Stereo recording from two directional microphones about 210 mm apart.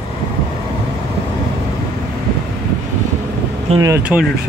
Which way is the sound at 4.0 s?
5° right (ahead or behind).